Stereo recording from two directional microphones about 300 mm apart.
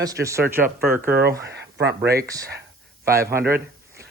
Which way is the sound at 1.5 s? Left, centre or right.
Right.